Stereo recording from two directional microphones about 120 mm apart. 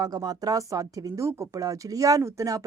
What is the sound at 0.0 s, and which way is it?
Speech, 35° right (ahead or behind).